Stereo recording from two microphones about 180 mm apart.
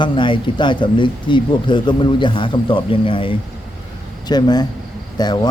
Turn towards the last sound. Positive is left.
turn(degrees=20)  # may be behind; listen again after turning